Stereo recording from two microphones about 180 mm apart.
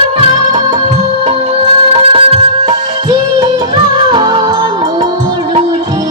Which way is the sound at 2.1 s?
35° right (ahead or behind).